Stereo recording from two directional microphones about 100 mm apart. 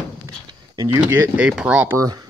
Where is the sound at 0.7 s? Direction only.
40° right (ahead or behind).